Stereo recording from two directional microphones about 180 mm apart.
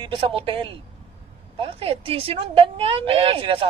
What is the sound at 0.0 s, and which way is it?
A woman's voice, 30° right (ahead or behind).